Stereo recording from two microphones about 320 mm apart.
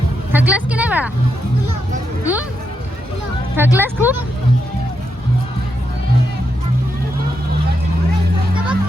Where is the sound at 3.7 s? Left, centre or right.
Centre.